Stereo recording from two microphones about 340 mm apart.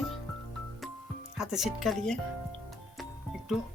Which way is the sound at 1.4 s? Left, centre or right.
Centre.